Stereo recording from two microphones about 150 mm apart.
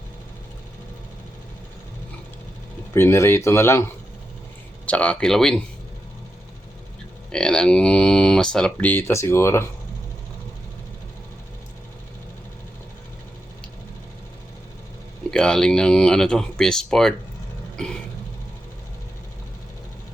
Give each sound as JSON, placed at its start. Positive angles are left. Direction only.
{"t": 2.9, "sound": "speech", "side_deg": 15}
{"t": 4.9, "sound": "speech", "side_deg": 10}
{"t": 7.3, "sound": "speech", "side_deg": 5}
{"t": 15.3, "sound": "speech", "side_deg": 5}